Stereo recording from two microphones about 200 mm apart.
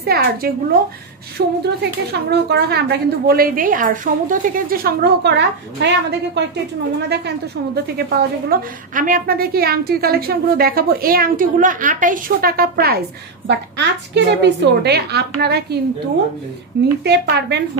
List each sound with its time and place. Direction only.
0.0 s a woman's voice: 50° right (ahead or behind)
1.4 s a woman's voice: 65° right (ahead or behind); by 13.0 s 50° right (ahead or behind)
13.5 s a woman's voice: 60° right (ahead or behind)
17.0 s a woman's voice: 55° right (ahead or behind)